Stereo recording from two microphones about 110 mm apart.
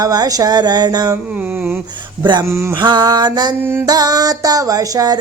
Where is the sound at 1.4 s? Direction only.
15° right (ahead or behind).